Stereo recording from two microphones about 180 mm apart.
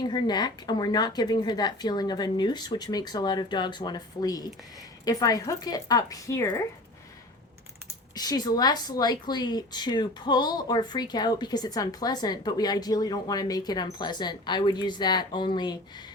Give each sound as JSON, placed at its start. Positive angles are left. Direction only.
{"t": 0.0, "sound": "a woman's voice", "side_deg": 25}
{"t": 8.1, "sound": "a woman's voice", "side_deg": 20}